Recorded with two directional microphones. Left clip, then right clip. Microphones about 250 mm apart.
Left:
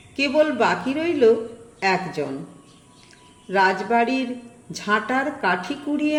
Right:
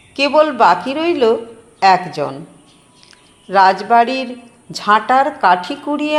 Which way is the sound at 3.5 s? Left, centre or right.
Centre.